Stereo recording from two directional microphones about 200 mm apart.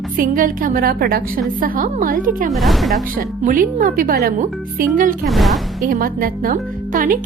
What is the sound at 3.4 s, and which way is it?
A woman's voice, 45° right (ahead or behind).